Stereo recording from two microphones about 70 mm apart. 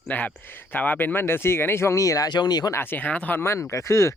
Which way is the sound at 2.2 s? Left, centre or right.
Left.